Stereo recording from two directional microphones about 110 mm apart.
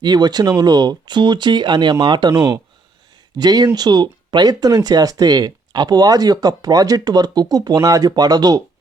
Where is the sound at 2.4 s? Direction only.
30° right (ahead or behind).